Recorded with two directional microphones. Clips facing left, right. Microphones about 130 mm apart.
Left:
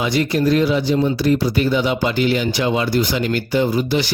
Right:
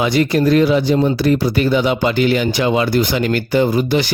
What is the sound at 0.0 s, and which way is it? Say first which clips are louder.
Speech: right 3 dB; 60° right (ahead or behind).